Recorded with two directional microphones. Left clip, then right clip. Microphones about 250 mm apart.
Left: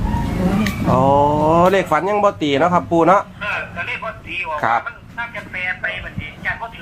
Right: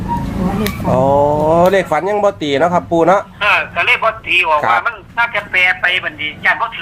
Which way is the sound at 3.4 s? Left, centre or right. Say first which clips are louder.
Right 10 dB; right.